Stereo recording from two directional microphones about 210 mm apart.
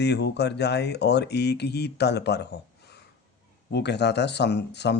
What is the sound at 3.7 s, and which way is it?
Speech, 55° left (ahead or behind).